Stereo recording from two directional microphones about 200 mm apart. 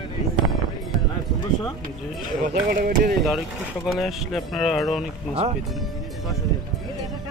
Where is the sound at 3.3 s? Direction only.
Centre (ahead or behind).